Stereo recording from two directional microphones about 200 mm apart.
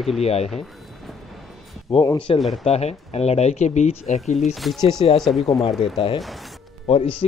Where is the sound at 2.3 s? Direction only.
25° left (ahead or behind).